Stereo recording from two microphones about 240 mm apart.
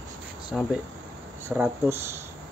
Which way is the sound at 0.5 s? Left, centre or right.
Centre.